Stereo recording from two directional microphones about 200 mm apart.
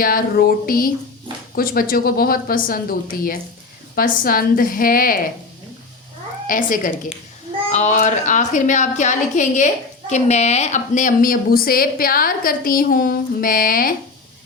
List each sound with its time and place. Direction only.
0.0 s a woman's voice: 45° left (ahead or behind)
3.9 s a woman's voice: 45° left (ahead or behind)
6.5 s a woman's voice: 45° left (ahead or behind)